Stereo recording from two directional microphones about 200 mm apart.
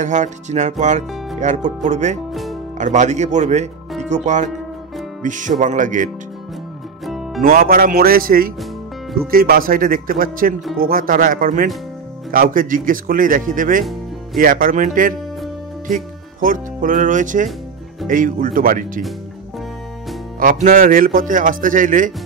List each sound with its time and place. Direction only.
0.0 s speech: 35° right (ahead or behind)
7.1 s music: centre (ahead or behind)
7.4 s speech: 45° right (ahead or behind)
20.6 s speech: 45° right (ahead or behind)